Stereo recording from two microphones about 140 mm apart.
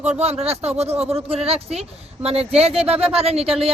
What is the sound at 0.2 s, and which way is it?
Speech, 50° right (ahead or behind).